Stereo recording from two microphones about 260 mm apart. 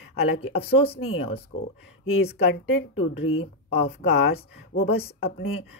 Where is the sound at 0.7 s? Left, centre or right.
Left.